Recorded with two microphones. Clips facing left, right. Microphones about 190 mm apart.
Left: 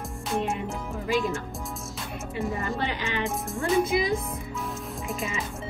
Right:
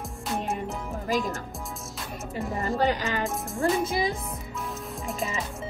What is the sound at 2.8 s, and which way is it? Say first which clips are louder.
Speech: right 4 dB; 40° right (ahead or behind).